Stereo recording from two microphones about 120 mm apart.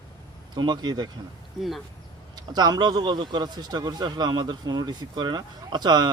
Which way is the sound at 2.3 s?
35° right (ahead or behind).